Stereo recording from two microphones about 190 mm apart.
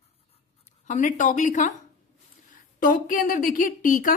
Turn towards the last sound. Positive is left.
turn(degrees=45)  # may be behind; listen again after turning